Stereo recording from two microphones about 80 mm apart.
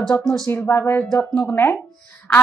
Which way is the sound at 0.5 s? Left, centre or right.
Left.